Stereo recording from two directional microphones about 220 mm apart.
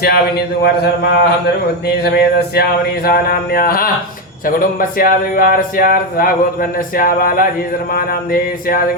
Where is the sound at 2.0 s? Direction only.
45° left (ahead or behind).